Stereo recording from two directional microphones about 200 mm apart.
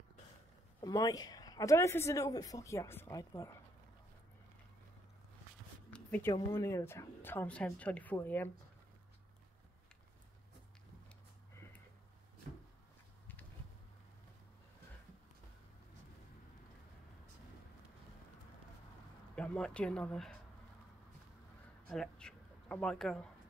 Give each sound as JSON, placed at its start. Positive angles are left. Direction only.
{"t": 0.7, "sound": "speech", "side_deg": 20}
{"t": 5.9, "sound": "a sound", "side_deg": 5}
{"t": 6.5, "sound": "speech", "side_deg": 15}
{"t": 19.3, "sound": "speech", "side_deg": 5}
{"t": 21.8, "sound": "speech", "side_deg": 5}